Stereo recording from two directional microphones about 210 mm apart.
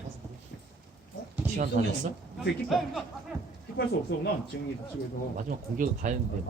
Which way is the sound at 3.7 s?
50° left (ahead or behind).